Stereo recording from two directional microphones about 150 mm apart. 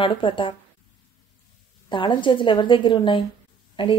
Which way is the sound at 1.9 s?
35° left (ahead or behind).